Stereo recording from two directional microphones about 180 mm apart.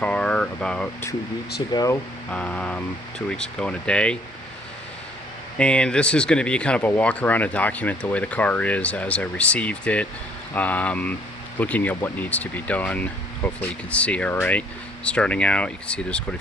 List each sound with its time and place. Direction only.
0.0 s speech: 5° left (ahead or behind)
1.7 s speech: 20° left (ahead or behind)
2.3 s speech: 5° left (ahead or behind)
5.5 s speech: 5° left (ahead or behind)